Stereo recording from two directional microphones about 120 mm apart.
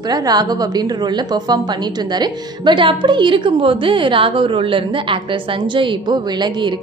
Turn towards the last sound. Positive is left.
turn(degrees=-40)  # may be behind; listen again after turning